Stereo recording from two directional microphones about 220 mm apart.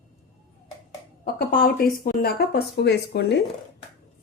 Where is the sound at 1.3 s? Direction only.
40° left (ahead or behind).